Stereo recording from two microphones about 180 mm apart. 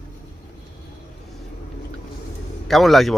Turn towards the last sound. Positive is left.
turn(degrees=0)  # may be behind; listen again after turning